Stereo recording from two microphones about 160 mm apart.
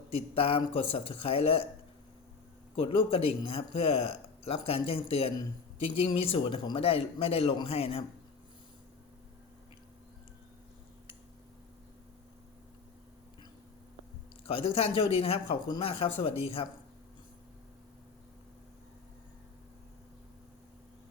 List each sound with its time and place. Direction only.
0.3 s speech: 35° left (ahead or behind)
2.7 s speech: 35° left (ahead or behind)
14.8 s speech: 35° left (ahead or behind)